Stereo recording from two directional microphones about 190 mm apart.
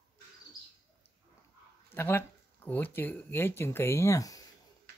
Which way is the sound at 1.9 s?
10° left (ahead or behind).